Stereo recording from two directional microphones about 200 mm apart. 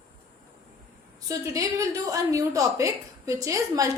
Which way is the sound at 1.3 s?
15° right (ahead or behind).